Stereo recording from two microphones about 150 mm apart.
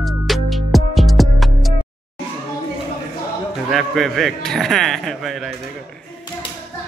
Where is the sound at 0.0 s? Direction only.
Centre (ahead or behind).